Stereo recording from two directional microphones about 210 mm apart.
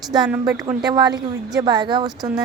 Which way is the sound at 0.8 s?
20° right (ahead or behind).